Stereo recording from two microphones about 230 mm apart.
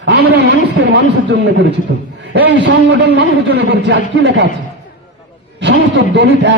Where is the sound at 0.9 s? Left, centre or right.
Right.